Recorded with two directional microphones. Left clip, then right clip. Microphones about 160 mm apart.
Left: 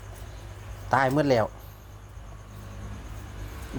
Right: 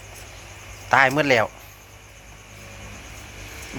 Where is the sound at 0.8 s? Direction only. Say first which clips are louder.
Right 6 dB; 15° left (ahead or behind).